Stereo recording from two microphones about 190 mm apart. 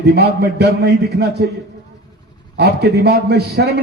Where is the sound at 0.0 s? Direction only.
60° right (ahead or behind).